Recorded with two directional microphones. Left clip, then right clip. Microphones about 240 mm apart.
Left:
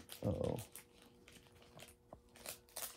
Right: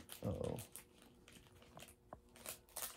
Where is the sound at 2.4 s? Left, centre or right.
Centre.